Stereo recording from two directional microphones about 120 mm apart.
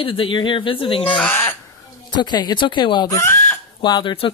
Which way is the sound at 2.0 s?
40° left (ahead or behind).